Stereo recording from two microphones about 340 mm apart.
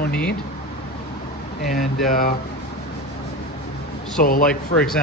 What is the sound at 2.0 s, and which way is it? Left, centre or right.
Speech, left.